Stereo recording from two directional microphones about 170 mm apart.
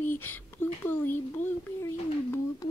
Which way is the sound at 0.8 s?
10° left (ahead or behind).